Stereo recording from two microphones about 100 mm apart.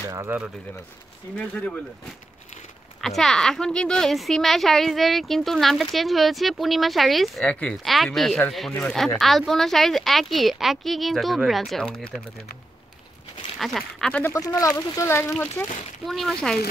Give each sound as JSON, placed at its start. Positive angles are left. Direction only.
{"t": 0.3, "sound": "speech", "side_deg": -20}
{"t": 1.3, "sound": "speech", "side_deg": 15}
{"t": 3.0, "sound": "a woman's voice", "side_deg": 0}
{"t": 13.6, "sound": "a woman's voice", "side_deg": 0}
{"t": 14.3, "sound": "speech", "side_deg": 30}
{"t": 15.6, "sound": "speech", "side_deg": 15}
{"t": 16.1, "sound": "a woman's voice", "side_deg": 0}